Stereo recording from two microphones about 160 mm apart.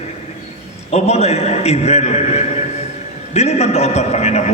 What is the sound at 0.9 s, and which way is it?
A man's voice, 40° left (ahead or behind).